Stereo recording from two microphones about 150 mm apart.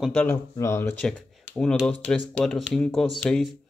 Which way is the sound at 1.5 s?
5° left (ahead or behind).